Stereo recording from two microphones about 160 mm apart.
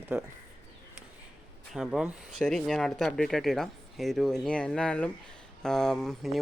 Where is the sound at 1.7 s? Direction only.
5° right (ahead or behind).